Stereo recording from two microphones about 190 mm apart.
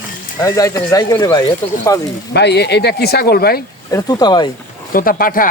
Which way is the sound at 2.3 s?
60° left (ahead or behind).